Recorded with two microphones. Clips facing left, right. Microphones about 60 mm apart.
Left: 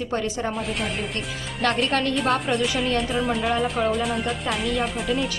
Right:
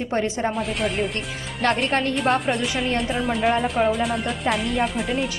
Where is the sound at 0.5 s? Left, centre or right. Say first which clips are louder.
Right 3 dB; centre.